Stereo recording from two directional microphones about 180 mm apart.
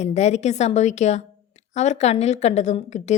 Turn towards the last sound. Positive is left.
turn(degrees=40)  # may be behind; listen again after turning